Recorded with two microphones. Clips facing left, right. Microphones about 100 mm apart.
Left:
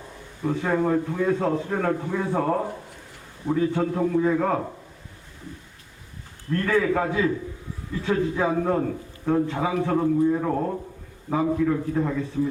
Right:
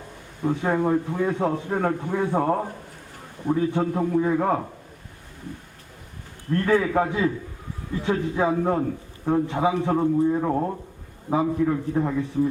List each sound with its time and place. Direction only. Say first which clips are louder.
0.4 s a man's voice: right 1 dB; 20° right (ahead or behind)
6.5 s a man's voice: right 1 dB; 20° right (ahead or behind)
12.4 s speech: right 3 dB; 35° right (ahead or behind)